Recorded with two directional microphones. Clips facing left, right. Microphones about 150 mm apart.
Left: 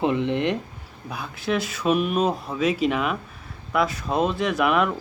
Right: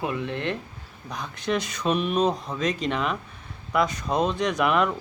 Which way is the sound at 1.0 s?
5° left (ahead or behind).